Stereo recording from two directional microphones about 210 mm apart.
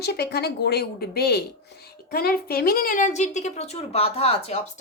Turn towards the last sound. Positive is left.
turn(degrees=30)  # may be behind; listen again after turning